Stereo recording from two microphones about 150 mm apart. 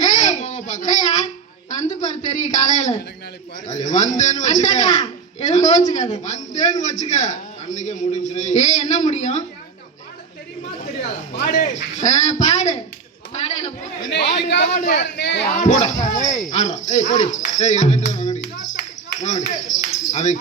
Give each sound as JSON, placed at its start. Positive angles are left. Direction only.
{"t": 0.0, "sound": "babbling", "side_deg": 55}
{"t": 1.8, "sound": "a man's voice", "side_deg": 55}
{"t": 11.4, "sound": "a man's voice", "side_deg": 55}